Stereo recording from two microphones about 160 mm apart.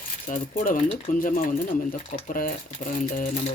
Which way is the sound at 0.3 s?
55° left (ahead or behind).